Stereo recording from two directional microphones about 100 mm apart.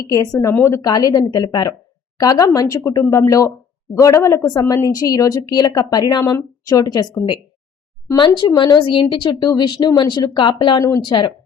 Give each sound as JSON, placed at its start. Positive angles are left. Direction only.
{"t": 0.1, "sound": "speech", "side_deg": 30}
{"t": 8.1, "sound": "speech", "side_deg": 50}